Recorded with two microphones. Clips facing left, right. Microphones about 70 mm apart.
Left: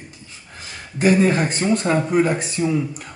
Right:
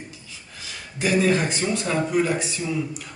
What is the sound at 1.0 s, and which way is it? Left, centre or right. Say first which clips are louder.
A man's voice: left 4 dB; left.